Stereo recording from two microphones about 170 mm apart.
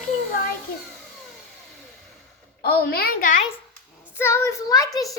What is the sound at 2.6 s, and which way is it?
Speech, 65° left (ahead or behind).